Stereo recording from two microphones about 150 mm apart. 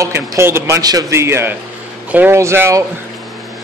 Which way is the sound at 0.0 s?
20° right (ahead or behind).